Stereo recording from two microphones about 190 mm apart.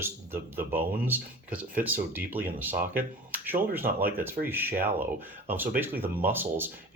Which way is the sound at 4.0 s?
50° right (ahead or behind).